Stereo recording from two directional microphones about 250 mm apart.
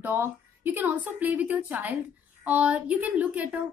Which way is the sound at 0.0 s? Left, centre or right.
Centre.